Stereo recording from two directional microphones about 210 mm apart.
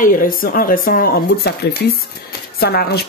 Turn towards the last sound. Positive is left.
turn(degrees=50)  # may be behind; listen again after turning